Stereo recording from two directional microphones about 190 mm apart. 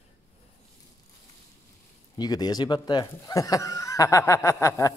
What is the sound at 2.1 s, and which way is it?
Speech, 20° left (ahead or behind).